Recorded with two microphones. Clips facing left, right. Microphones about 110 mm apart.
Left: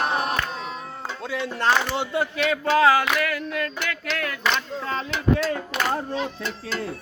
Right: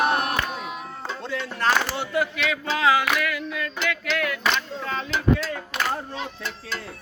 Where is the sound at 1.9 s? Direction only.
25° left (ahead or behind).